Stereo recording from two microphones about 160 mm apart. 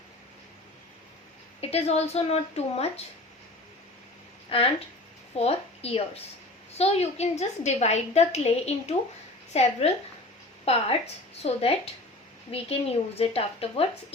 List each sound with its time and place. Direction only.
1.6 s a woman's voice: 40° left (ahead or behind)
4.4 s a woman's voice: 35° left (ahead or behind)